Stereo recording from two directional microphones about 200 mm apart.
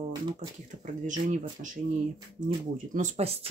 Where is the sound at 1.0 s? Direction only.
40° right (ahead or behind).